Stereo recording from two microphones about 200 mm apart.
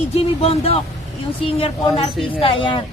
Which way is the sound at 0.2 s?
30° left (ahead or behind).